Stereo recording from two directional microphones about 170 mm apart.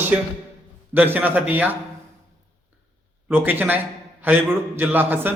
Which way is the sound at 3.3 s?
10° right (ahead or behind).